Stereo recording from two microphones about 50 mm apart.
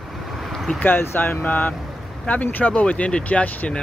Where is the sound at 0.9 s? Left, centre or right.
Left.